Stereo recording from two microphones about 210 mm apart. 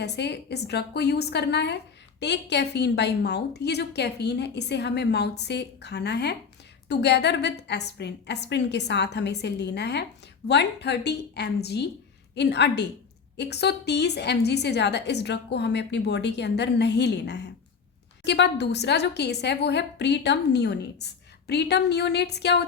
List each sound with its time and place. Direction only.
0.0 s a woman's voice: 55° left (ahead or behind)